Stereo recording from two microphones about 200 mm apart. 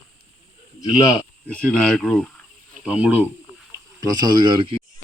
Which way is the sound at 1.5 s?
5° left (ahead or behind).